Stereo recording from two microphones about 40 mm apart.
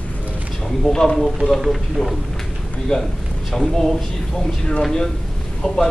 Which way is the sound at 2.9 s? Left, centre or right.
Centre.